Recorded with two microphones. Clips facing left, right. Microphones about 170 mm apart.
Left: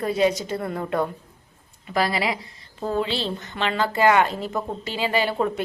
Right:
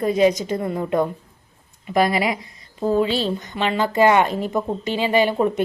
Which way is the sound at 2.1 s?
30° left (ahead or behind).